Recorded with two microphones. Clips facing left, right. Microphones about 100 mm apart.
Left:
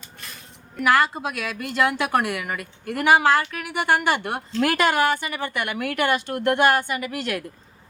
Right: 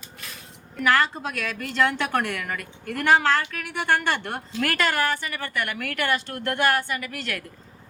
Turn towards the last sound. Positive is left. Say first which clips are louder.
# left 4 dB
turn(degrees=20)  # may be behind; listen again after turning